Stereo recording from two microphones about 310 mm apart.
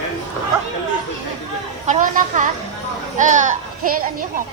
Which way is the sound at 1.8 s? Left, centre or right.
Right.